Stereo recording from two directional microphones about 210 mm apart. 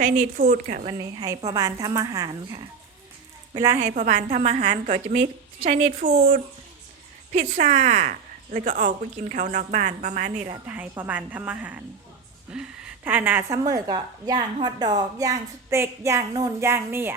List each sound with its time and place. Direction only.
0.0 s a woman's voice: 40° right (ahead or behind)
0.9 s a woman's voice: 20° right (ahead or behind)
3.8 s a woman's voice: 40° right (ahead or behind)
10.7 s a woman's voice: 10° right (ahead or behind)